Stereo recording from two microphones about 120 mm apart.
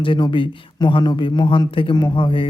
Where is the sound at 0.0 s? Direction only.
45° left (ahead or behind).